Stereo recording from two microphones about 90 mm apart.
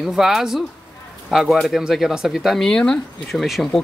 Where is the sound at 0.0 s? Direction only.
5° right (ahead or behind).